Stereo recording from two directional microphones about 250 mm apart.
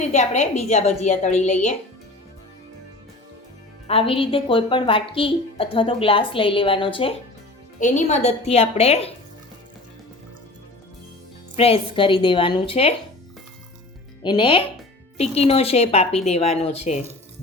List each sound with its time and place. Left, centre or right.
0.0 s a woman's voice: left
3.8 s a woman's voice: left
11.5 s a woman's voice: left
14.2 s a woman's voice: centre